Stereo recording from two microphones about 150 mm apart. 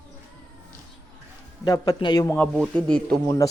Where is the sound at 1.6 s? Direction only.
25° left (ahead or behind).